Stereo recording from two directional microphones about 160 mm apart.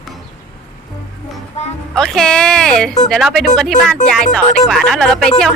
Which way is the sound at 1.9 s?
5° left (ahead or behind).